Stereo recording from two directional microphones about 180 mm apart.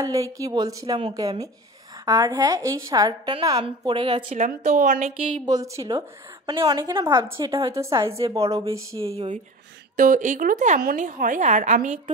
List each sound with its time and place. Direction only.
0.0 s a woman's voice: 20° right (ahead or behind)
2.0 s a woman's voice: 20° right (ahead or behind)
4.3 s a woman's voice: 45° right (ahead or behind)
5.4 s a woman's voice: 20° right (ahead or behind)
9.0 s speech: 35° right (ahead or behind)
9.9 s a woman's voice: 45° right (ahead or behind)